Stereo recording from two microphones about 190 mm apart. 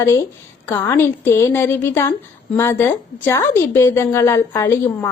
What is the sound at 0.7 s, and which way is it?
Speech, 15° left (ahead or behind).